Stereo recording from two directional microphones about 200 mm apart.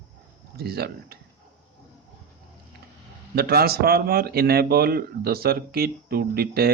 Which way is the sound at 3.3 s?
50° right (ahead or behind).